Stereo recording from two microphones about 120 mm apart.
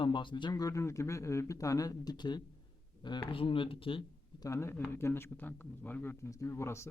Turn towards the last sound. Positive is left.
turn(degrees=20)  # may be behind; listen again after turning